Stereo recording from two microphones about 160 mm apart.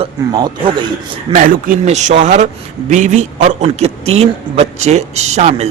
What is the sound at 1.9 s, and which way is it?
A man's voice, 45° right (ahead or behind).